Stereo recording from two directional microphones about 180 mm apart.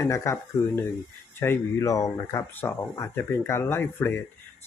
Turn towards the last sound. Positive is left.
turn(degrees=15)  # may be behind; listen again after turning